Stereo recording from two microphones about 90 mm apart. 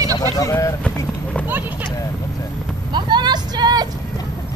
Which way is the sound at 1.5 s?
20° right (ahead or behind).